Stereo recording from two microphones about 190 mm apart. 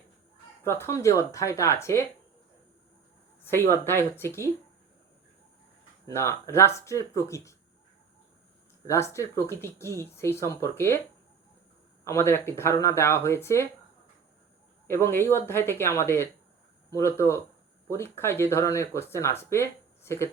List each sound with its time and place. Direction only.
0.6 s speech: 15° left (ahead or behind)
3.4 s speech: 10° left (ahead or behind)
6.1 s speech: 15° left (ahead or behind)
8.9 s speech: 15° left (ahead or behind)
12.0 s speech: 15° left (ahead or behind)
14.8 s speech: 15° left (ahead or behind)